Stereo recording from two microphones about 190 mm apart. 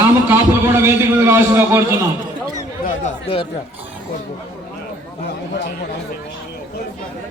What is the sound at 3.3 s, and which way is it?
Speech, 30° left (ahead or behind).